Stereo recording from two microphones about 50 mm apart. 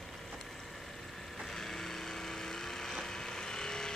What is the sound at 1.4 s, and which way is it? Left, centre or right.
Vehicle, centre.